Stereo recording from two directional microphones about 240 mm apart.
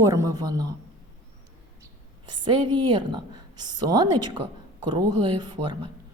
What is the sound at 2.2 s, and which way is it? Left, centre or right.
A woman's voice, centre.